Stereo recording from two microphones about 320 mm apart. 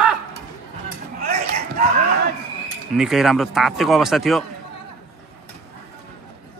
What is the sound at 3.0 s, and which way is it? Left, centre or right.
Speech, centre.